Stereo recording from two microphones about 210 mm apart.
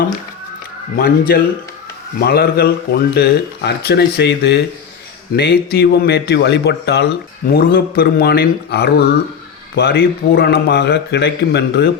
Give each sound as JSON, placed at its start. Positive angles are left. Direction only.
{"t": 0.9, "sound": "speech", "side_deg": 45}